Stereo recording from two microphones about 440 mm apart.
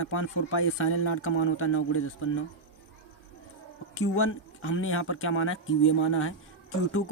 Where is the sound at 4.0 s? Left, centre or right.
Left.